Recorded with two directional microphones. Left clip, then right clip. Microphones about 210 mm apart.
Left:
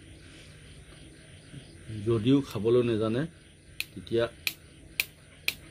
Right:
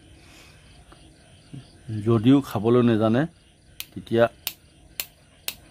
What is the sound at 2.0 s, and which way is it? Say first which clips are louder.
Speech: right 6 dB; 45° right (ahead or behind).